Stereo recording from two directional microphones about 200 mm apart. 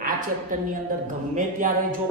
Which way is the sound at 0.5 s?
40° right (ahead or behind).